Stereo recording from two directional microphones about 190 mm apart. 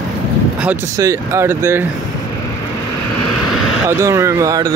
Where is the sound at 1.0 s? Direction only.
15° right (ahead or behind).